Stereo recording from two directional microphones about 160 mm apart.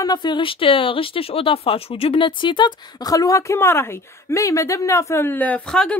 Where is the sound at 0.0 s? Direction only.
25° left (ahead or behind).